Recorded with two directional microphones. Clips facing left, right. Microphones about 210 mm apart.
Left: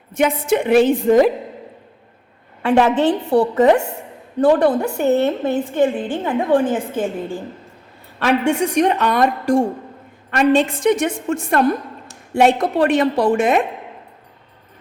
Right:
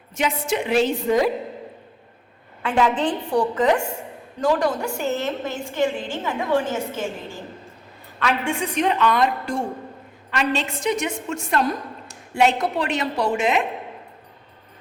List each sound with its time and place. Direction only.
0.2 s a woman's voice: 55° left (ahead or behind)
2.8 s a woman's voice: 65° left (ahead or behind)
3.2 s a woman's voice: 35° left (ahead or behind)
4.4 s a woman's voice: 60° left (ahead or behind)
8.5 s a woman's voice: 70° left (ahead or behind)
9.0 s a woman's voice: 50° left (ahead or behind)